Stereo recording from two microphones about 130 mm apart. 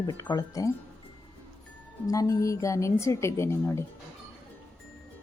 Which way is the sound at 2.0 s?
25° left (ahead or behind).